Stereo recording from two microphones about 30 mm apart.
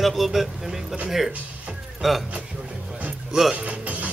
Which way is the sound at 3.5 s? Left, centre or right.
Right.